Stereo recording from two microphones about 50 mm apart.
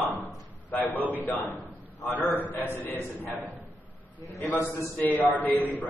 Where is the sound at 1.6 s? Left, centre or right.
Left.